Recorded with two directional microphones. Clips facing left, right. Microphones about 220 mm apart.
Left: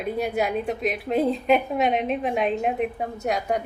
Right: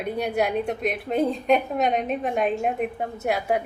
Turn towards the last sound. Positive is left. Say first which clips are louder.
# right 1 dB
turn(degrees=-5)  # may be behind; listen again after turning